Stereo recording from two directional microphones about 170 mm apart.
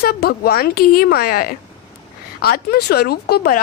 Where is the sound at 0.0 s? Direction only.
65° left (ahead or behind).